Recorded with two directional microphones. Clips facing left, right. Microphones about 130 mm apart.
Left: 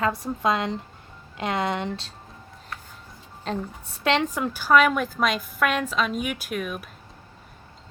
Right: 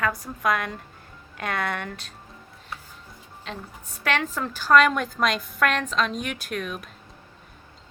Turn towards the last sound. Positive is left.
turn(degrees=5)  # may be behind; listen again after turning